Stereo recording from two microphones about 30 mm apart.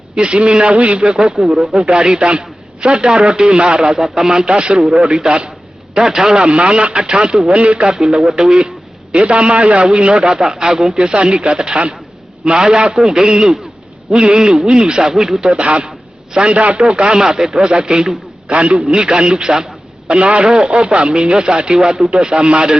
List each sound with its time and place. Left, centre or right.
0.3 s a man's voice: right
4.0 s speech: centre; by 5.5 s right
5.9 s speech: centre
6.4 s speech: right
7.5 s speech: right
7.9 s speech: right
8.2 s speech: centre
8.4 s speech: right
11.3 s speech: right
15.1 s speech: centre
15.5 s speech: right
17.0 s speech: right
18.9 s speech: right
20.1 s speech: right